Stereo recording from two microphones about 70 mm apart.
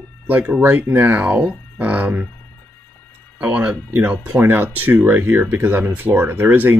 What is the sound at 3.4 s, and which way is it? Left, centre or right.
Speech, centre.